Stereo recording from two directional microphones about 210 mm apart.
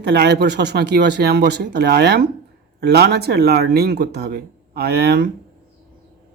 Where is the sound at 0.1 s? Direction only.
50° right (ahead or behind).